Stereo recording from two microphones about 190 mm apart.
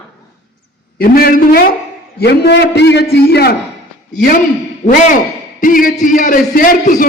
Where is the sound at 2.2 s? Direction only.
60° left (ahead or behind).